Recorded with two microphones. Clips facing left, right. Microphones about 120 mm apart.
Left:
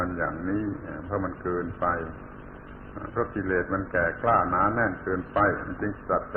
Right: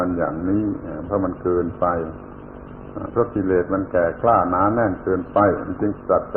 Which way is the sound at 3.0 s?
40° right (ahead or behind).